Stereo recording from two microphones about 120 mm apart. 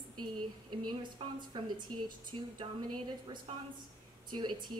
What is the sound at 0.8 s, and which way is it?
Speech, 40° right (ahead or behind).